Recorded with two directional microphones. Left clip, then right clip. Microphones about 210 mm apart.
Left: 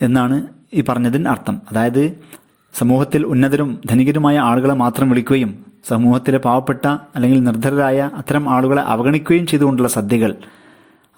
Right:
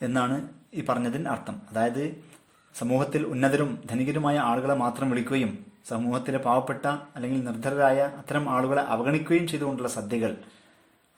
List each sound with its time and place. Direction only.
0.0 s a man's voice: 40° left (ahead or behind)